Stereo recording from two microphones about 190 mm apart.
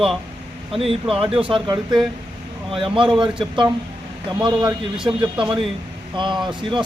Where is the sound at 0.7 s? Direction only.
30° right (ahead or behind).